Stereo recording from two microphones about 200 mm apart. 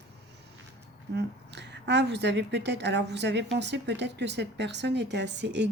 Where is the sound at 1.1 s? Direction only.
60° right (ahead or behind).